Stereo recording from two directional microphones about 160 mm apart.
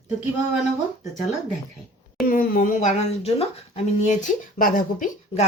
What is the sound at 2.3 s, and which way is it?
Speech, 65° left (ahead or behind).